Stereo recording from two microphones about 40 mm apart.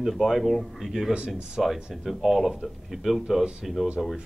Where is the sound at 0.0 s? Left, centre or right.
Centre.